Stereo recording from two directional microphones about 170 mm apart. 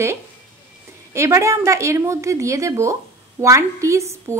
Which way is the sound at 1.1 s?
15° right (ahead or behind).